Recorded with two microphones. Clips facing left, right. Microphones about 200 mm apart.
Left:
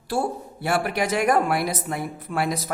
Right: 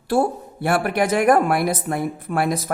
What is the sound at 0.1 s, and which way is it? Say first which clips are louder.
A man's voice: right 6 dB; 55° right (ahead or behind).